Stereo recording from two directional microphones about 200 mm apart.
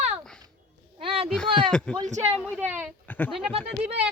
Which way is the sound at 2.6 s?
10° right (ahead or behind).